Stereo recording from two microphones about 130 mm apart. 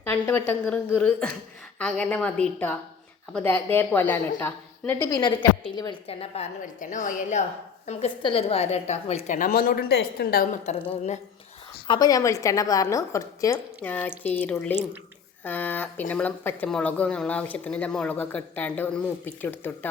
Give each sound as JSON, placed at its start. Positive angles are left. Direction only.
{"t": 0.0, "sound": "speech", "side_deg": 20}
{"t": 5.1, "sound": "a woman's voice", "side_deg": 35}
{"t": 6.1, "sound": "a woman's voice", "side_deg": 50}
{"t": 6.6, "sound": "a woman's voice", "side_deg": 75}
{"t": 7.9, "sound": "a woman's voice", "side_deg": 50}
{"t": 10.4, "sound": "a woman's voice", "side_deg": 60}
{"t": 11.9, "sound": "a woman's voice", "side_deg": 30}
{"t": 13.8, "sound": "speech", "side_deg": 15}